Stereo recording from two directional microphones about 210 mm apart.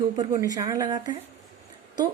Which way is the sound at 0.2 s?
15° right (ahead or behind).